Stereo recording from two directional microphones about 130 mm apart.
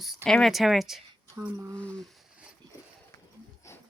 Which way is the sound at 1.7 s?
10° left (ahead or behind).